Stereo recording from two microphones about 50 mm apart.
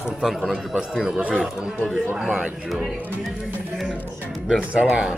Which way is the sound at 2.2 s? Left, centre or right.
Right.